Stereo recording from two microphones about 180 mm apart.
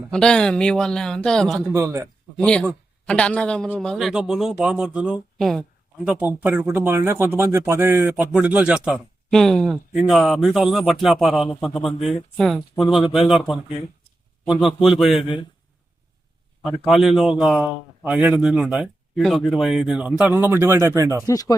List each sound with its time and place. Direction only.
0.1 s a man's voice: 5° left (ahead or behind)
1.6 s speech: 15° right (ahead or behind)
2.4 s a man's voice: 5° left (ahead or behind)
14.8 s a man's voice: centre (ahead or behind)
16.9 s a man's voice: centre (ahead or behind)
21.2 s speech: 20° left (ahead or behind)